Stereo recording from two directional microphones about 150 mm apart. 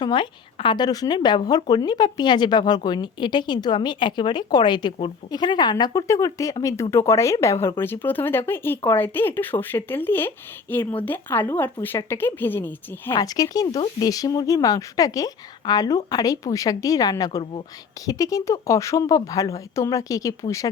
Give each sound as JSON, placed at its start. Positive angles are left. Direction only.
{"t": 0.0, "sound": "a woman's voice", "side_deg": 30}
{"t": 13.1, "sound": "a woman's voice", "side_deg": 25}